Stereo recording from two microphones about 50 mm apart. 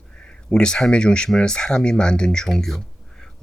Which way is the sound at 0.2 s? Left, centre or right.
Centre.